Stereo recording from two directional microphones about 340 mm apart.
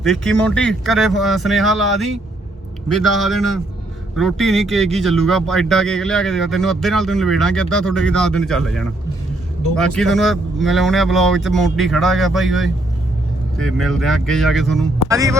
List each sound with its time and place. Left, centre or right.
0.0 s a man's voice: centre